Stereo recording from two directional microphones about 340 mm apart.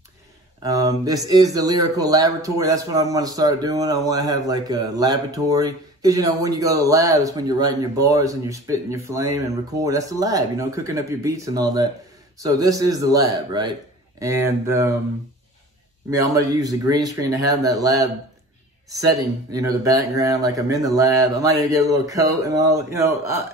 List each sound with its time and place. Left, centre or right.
0.6 s speech: centre
16.1 s speech: centre